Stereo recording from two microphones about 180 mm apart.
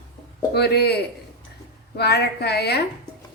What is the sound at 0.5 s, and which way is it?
Speech, 65° left (ahead or behind).